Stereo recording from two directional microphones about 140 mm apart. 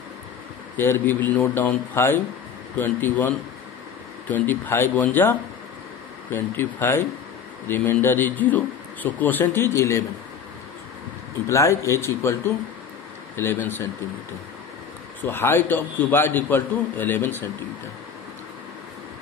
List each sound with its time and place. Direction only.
0.7 s speech: 15° left (ahead or behind)
11.4 s speech: 20° left (ahead or behind)
13.4 s speech: 15° left (ahead or behind)
15.2 s speech: 15° left (ahead or behind)